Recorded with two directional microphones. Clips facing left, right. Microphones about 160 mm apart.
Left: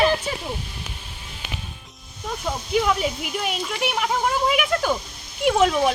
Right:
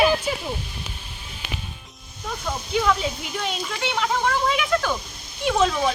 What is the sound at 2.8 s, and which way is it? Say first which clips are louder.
Speech: left 1 dB; 10° left (ahead or behind).